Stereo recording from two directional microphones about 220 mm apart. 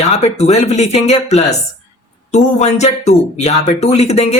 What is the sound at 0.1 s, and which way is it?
Speech, 30° left (ahead or behind).